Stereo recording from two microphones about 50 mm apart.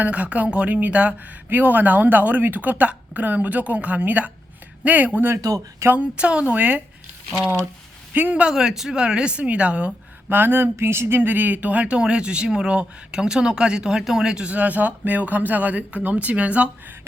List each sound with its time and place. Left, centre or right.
0.0 s a woman's voice: right
5.3 s speech: right
6.0 s a woman's voice: right
6.5 s a woman's voice: right
8.1 s a woman's voice: right
8.4 s a woman's voice: centre
10.2 s a sound: right
11.2 s speech: right; by 14.4 s centre
14.4 s a woman's voice: right